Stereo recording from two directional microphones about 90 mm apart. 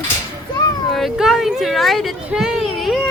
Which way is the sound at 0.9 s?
Centre (ahead or behind).